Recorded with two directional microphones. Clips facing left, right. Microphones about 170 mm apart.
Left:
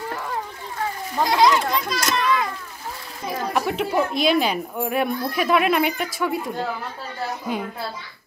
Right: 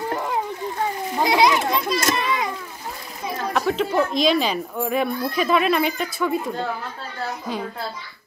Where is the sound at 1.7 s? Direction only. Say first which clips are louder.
Right 2 dB; centre (ahead or behind).